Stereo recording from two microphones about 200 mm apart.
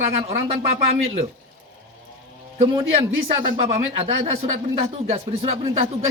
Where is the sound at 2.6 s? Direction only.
25° right (ahead or behind).